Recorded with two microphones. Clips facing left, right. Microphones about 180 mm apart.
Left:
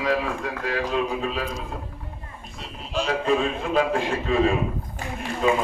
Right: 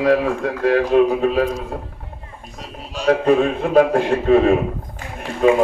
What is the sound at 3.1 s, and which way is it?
A man's voice, 60° right (ahead or behind).